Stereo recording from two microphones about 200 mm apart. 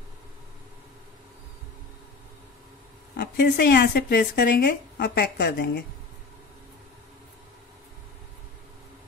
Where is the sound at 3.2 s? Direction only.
50° left (ahead or behind).